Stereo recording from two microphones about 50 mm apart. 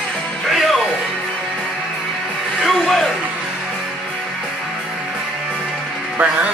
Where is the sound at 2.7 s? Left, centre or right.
Centre.